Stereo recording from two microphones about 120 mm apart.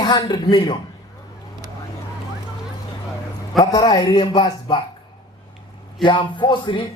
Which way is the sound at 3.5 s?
35° left (ahead or behind).